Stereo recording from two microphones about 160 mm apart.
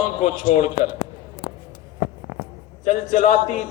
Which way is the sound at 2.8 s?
50° left (ahead or behind).